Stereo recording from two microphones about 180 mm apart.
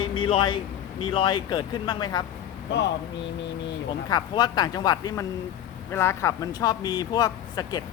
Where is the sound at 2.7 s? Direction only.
75° left (ahead or behind).